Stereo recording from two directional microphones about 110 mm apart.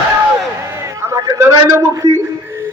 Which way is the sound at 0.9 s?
30° right (ahead or behind).